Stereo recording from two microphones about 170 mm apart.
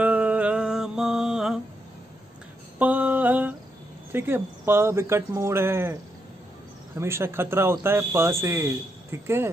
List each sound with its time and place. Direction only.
0.0 s music: 10° right (ahead or behind)
2.8 s mantra: 10° right (ahead or behind)
4.1 s speech: 15° right (ahead or behind)
7.0 s speech: 15° right (ahead or behind)